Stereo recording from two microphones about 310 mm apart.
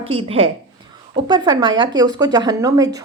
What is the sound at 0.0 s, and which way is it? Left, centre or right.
Speech, centre.